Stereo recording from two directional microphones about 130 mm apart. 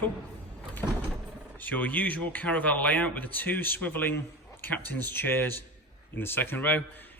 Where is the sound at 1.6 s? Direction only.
10° left (ahead or behind).